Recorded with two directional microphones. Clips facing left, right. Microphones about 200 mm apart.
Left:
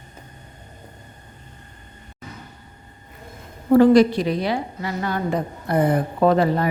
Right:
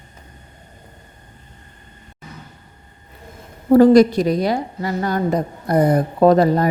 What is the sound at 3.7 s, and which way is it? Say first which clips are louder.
A woman's voice: right 3 dB; 40° right (ahead or behind).